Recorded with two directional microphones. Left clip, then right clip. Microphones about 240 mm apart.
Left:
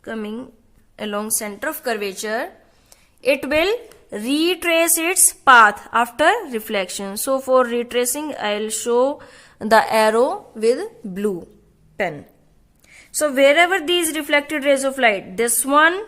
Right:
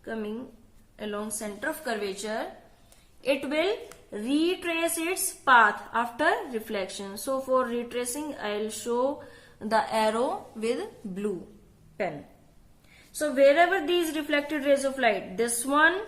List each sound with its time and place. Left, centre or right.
0.0 s a woman's voice: left
13.1 s a woman's voice: left